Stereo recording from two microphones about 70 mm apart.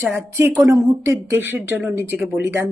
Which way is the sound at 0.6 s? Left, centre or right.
Right.